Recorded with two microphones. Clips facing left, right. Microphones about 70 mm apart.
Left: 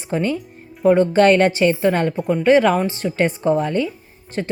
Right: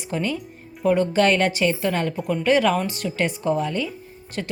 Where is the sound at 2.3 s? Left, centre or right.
Left.